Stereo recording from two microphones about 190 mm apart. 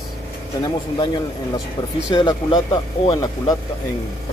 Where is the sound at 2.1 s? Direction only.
20° left (ahead or behind).